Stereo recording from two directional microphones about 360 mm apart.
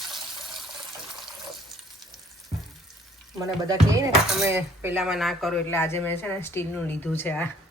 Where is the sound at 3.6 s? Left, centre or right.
Centre.